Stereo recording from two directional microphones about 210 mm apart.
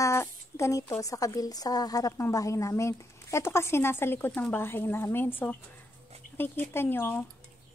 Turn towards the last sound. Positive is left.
turn(degrees=10)  # may be behind; listen again after turning